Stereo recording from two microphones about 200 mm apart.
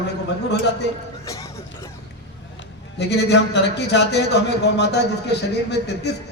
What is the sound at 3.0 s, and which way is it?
Speech, 55° left (ahead or behind).